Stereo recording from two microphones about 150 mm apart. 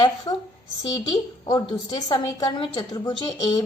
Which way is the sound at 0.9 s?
25° left (ahead or behind).